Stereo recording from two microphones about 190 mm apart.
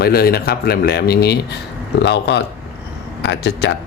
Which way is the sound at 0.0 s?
55° left (ahead or behind).